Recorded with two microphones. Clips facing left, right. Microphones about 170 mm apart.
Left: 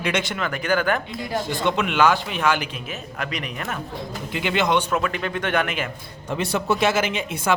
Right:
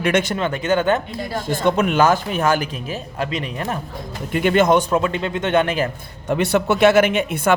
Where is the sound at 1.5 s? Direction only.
45° right (ahead or behind); by 3.8 s 30° right (ahead or behind).